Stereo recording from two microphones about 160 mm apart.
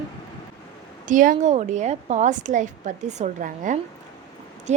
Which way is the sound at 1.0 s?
55° right (ahead or behind).